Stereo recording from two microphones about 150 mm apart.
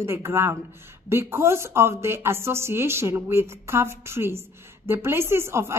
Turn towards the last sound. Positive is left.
turn(degrees=-15)  # may be behind; listen again after turning